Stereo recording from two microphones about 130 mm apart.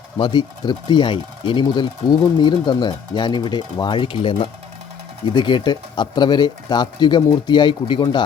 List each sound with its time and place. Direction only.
0.2 s speech: 35° left (ahead or behind)